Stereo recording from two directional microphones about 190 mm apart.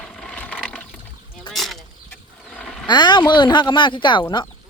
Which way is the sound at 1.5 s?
Centre (ahead or behind).